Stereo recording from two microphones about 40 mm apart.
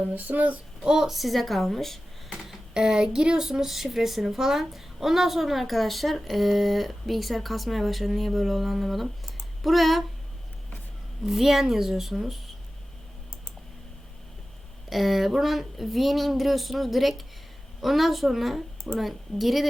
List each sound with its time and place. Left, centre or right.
0.1 s child singing: right
0.9 s speech: centre
2.7 s a woman's voice: centre
11.3 s a woman's voice: centre
14.8 s a woman's voice: centre